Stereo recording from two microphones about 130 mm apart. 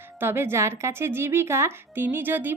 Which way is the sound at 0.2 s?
15° right (ahead or behind).